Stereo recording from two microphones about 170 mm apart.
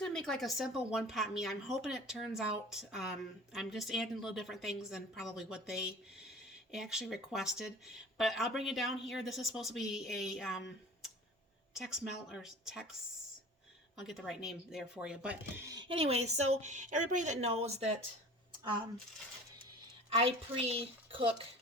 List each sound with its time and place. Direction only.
0.0 s speech: 5° left (ahead or behind)
11.7 s speech: 5° right (ahead or behind)
15.6 s a woman's voice: 25° right (ahead or behind)
20.1 s a woman's voice: 35° right (ahead or behind)